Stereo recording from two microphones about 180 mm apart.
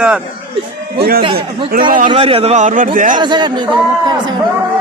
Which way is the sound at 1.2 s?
30° right (ahead or behind).